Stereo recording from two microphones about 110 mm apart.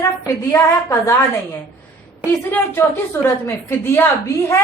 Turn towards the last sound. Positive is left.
turn(degrees=25)  # may be behind; listen again after turning